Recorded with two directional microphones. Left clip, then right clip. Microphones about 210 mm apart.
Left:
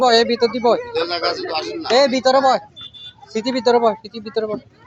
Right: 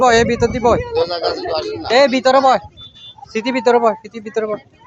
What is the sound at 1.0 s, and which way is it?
Speech, 55° left (ahead or behind).